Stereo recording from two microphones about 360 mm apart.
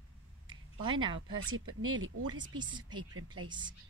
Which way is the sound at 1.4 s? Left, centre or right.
Right.